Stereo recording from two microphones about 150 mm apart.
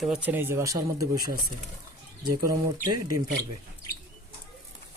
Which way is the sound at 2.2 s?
25° right (ahead or behind).